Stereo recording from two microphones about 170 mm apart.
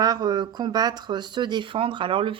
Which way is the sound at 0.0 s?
25° right (ahead or behind).